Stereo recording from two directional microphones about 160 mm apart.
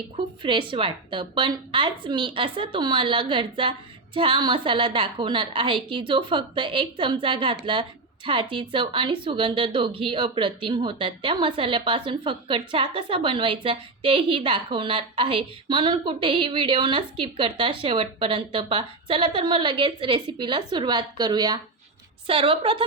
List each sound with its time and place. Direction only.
0.4 s a woman's voice: 30° right (ahead or behind)